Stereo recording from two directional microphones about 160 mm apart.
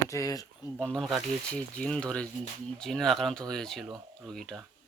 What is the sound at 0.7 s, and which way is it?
Speech, 5° left (ahead or behind).